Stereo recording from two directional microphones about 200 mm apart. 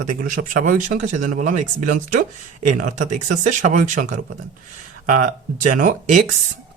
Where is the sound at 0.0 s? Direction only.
40° right (ahead or behind).